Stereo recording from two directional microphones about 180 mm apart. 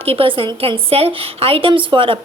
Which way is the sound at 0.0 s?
30° right (ahead or behind).